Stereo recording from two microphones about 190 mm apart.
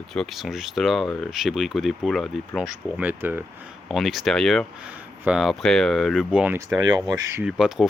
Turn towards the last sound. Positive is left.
turn(degrees=-5)  # may be behind; listen again after turning